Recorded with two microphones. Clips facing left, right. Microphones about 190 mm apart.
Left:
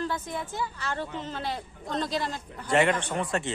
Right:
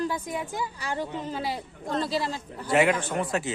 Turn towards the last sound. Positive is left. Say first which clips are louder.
# right 1 dB
turn(degrees=-5)  # may be behind; listen again after turning